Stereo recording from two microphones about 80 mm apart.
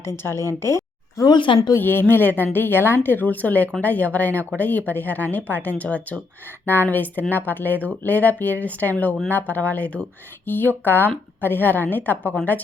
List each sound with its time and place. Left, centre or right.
0.0 s a woman's voice: left
1.3 s speech: left
1.8 s a woman's voice: left